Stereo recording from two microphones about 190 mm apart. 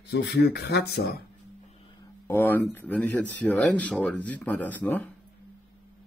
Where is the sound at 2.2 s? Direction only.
10° left (ahead or behind).